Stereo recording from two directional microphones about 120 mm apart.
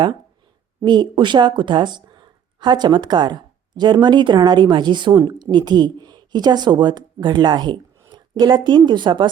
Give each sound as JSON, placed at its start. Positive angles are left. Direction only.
{"t": 0.8, "sound": "speech", "side_deg": -40}